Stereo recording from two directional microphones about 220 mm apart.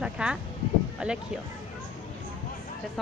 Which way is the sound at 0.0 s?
5° right (ahead or behind).